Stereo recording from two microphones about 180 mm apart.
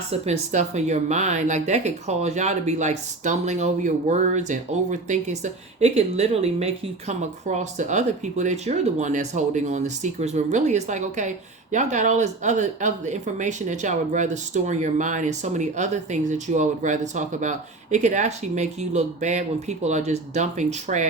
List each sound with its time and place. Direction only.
0.1 s speech: 40° right (ahead or behind)